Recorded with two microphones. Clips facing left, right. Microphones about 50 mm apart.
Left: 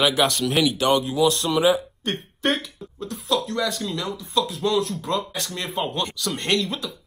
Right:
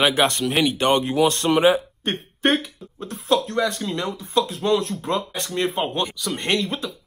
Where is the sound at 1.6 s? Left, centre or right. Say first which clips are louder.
Right 2 dB; right.